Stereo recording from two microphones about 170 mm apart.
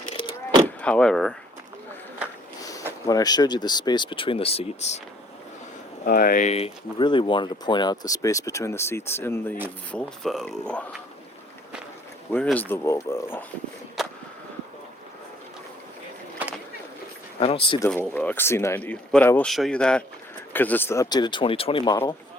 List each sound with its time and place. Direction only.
0.8 s speech: 5° left (ahead or behind)
2.6 s speech: 20° left (ahead or behind); by 4.9 s 35° left (ahead or behind)
6.1 s speech: 55° left (ahead or behind); by 9.6 s 15° left (ahead or behind)
9.9 s speech: 5° left (ahead or behind)
12.3 s speech: 5° left (ahead or behind)
14.0 s a sound: centre (ahead or behind)
17.4 s speech: 35° left (ahead or behind)
17.7 s speech: 10° left (ahead or behind); by 21.9 s 30° left (ahead or behind)